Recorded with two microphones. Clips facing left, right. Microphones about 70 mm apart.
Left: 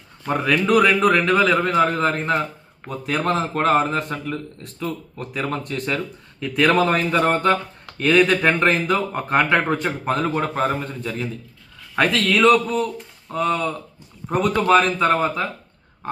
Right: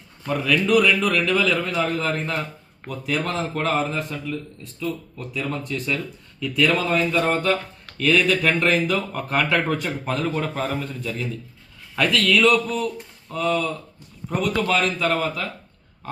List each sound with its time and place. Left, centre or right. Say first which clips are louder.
0.3 s speech: left 1 dB; left